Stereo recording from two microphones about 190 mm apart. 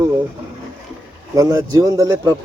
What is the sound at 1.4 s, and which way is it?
Speech, 20° right (ahead or behind).